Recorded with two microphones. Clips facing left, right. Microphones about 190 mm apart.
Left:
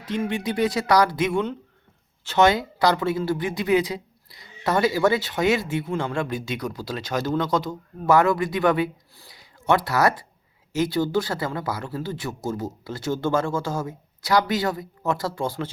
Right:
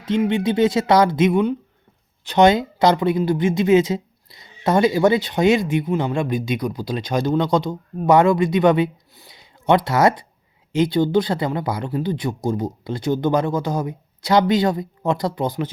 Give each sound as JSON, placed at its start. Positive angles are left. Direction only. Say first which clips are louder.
{"t": 0.0, "sound": "speech", "louder": "right 7 dB", "side_deg": -25}